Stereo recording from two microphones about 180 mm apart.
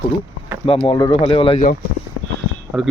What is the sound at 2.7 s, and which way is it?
Speech, 5° right (ahead or behind).